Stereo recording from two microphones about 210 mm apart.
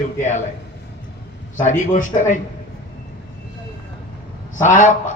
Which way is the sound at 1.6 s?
35° left (ahead or behind).